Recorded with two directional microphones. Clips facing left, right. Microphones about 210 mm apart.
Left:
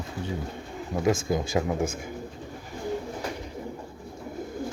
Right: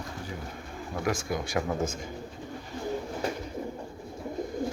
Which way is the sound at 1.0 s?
25° left (ahead or behind).